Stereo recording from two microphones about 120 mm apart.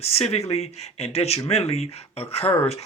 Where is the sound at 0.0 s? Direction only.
60° left (ahead or behind).